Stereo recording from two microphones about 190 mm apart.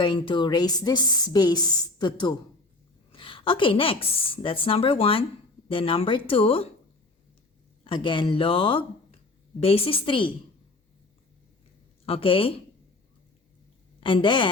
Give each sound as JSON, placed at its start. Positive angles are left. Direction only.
{"t": 0.0, "sound": "a woman's voice", "side_deg": 25}
{"t": 7.9, "sound": "a woman's voice", "side_deg": 25}
{"t": 12.0, "sound": "a woman's voice", "side_deg": 30}
{"t": 14.0, "sound": "a woman's voice", "side_deg": 25}